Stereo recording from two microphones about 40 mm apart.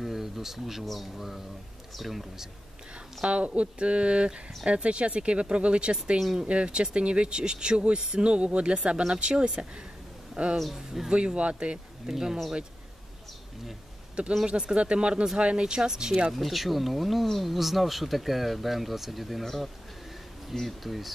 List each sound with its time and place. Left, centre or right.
0.0 s a sound: centre
0.8 s speech: centre
3.3 s speech: right
6.1 s speech: centre
6.4 s speech: right
10.6 s speech: centre
11.1 s speech: right
12.1 s speech: centre
14.4 s speech: centre
16.3 s speech: centre